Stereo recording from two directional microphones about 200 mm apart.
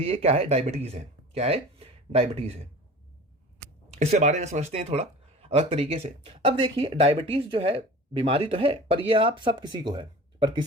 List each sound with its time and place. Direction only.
0.0 s speech: 30° right (ahead or behind)
3.9 s speech: 35° right (ahead or behind)